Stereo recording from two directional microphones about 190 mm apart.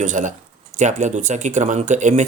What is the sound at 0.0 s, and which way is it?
Speech, 40° right (ahead or behind).